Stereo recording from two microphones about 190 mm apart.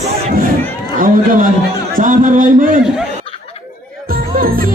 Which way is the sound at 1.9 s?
45° right (ahead or behind).